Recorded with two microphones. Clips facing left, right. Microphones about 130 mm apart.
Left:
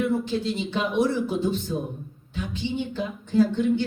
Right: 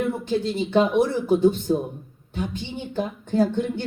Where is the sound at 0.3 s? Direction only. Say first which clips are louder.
Right 3 dB; 50° right (ahead or behind).